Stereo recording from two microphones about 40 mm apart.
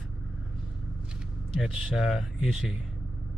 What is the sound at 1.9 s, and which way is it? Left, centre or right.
Mantra, centre.